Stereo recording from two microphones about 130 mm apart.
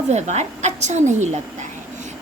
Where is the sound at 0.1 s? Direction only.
60° right (ahead or behind).